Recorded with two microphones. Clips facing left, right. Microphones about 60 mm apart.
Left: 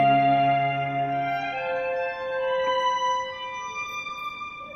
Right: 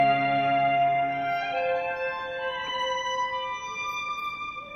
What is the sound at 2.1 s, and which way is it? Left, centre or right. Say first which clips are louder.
Music: left 4 dB; centre.